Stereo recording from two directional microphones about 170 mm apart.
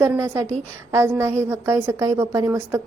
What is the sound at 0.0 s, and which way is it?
A woman's voice, 15° right (ahead or behind).